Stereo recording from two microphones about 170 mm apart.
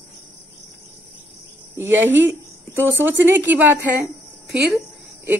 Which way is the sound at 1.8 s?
15° right (ahead or behind).